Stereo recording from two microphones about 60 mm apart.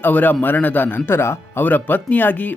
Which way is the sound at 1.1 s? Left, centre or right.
Left.